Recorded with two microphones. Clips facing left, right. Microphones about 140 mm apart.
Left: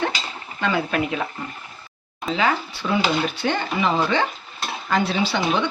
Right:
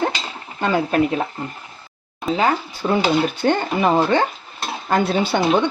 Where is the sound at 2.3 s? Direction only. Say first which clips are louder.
Right 3 dB; 40° right (ahead or behind).